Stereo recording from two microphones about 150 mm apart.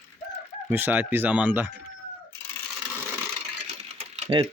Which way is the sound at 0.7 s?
15° right (ahead or behind).